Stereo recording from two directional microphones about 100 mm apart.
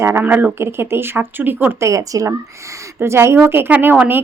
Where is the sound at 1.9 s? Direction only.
35° right (ahead or behind); by 4.2 s 15° right (ahead or behind).